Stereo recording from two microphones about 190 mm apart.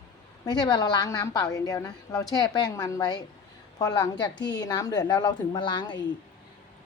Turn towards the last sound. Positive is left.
turn(degrees=25)  # may be behind; listen again after turning